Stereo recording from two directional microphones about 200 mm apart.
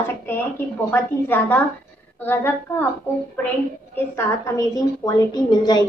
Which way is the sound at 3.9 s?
10° left (ahead or behind).